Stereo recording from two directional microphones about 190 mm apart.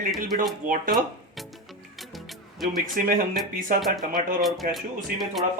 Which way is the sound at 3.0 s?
50° right (ahead or behind).